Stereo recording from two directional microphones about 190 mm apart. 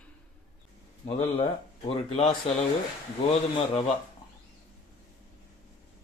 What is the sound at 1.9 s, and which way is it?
Speech, 30° left (ahead or behind).